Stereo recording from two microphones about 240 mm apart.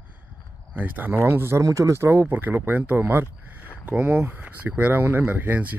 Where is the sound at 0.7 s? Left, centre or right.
Centre.